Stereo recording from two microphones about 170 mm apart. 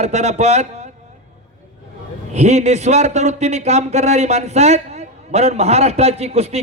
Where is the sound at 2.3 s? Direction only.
40° right (ahead or behind).